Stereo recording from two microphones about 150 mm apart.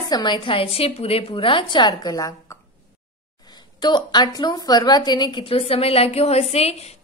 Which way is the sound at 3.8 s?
30° left (ahead or behind).